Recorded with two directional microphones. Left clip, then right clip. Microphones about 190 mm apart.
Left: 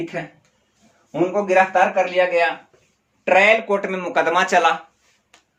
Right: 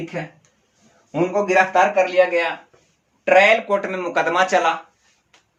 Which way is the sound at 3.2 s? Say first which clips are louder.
Right 1 dB; 15° left (ahead or behind).